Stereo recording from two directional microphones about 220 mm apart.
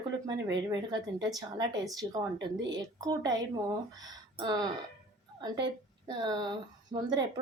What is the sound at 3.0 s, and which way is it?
Speech, 15° right (ahead or behind).